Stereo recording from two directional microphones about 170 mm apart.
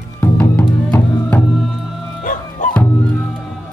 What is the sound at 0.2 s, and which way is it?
Music, 15° left (ahead or behind).